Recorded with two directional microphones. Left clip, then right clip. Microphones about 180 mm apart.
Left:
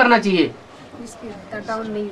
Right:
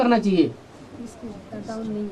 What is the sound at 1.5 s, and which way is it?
Speech, 20° left (ahead or behind).